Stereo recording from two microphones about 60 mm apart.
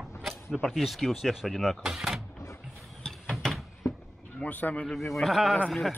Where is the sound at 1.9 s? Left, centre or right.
Centre.